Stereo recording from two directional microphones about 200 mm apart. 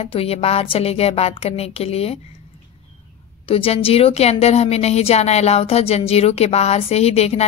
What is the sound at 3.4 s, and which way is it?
A woman's voice, 30° left (ahead or behind).